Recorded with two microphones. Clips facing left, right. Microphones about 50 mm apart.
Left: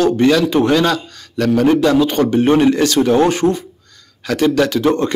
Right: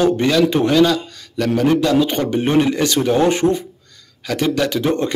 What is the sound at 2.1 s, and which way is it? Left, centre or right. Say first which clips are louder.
Speech: left 5 dB; centre.